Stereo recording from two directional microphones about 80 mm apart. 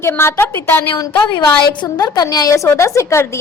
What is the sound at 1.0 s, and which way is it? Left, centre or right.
A woman's voice, left.